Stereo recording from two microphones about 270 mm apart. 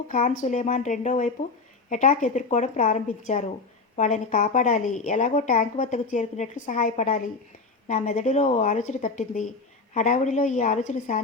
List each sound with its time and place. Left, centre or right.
0.1 s a woman's voice: left